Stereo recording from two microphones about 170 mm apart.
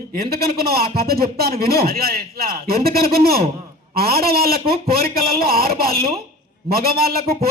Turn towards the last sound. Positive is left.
turn(degrees=-65)  # may be behind; listen again after turning